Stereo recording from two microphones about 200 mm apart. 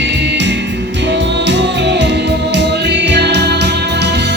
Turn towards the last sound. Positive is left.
turn(degrees=-60)  # may be behind; listen again after turning